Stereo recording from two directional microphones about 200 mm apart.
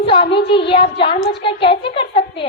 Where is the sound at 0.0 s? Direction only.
25° left (ahead or behind).